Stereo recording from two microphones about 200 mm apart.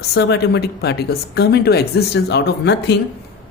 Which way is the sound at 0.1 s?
55° left (ahead or behind).